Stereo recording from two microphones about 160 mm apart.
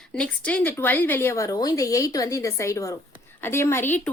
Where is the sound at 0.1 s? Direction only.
5° left (ahead or behind).